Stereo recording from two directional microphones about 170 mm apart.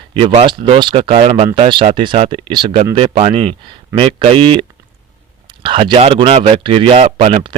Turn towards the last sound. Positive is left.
turn(degrees=-30)  # may be behind; listen again after turning